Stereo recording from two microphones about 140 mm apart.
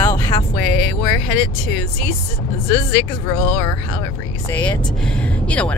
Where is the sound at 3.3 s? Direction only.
25° left (ahead or behind).